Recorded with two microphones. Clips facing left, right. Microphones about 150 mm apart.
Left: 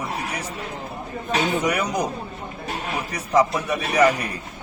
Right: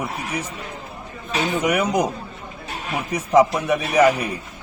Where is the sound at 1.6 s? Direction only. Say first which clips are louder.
Right 3 dB; 15° right (ahead or behind).